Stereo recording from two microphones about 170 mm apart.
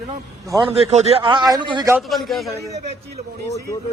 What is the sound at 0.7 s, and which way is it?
A man's voice, 35° right (ahead or behind).